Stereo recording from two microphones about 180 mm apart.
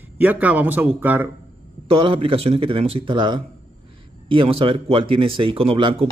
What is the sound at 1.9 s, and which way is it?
Speech, 30° right (ahead or behind).